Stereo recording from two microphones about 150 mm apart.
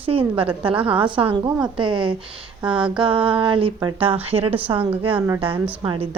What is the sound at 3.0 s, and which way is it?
Speech, 35° right (ahead or behind).